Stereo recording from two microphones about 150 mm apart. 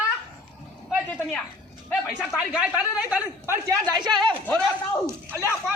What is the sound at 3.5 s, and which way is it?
A man's voice, 25° right (ahead or behind).